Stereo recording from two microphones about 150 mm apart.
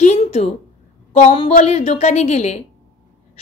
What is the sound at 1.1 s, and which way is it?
A woman's voice, 45° left (ahead or behind).